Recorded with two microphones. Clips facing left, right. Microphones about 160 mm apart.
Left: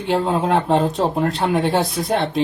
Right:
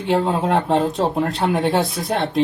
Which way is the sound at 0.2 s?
60° right (ahead or behind).